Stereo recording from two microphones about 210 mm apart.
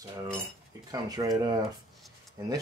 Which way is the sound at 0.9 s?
15° right (ahead or behind).